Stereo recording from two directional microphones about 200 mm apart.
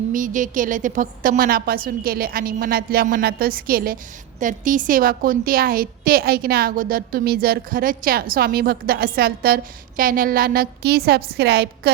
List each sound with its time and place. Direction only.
0.1 s a woman's voice: 40° right (ahead or behind)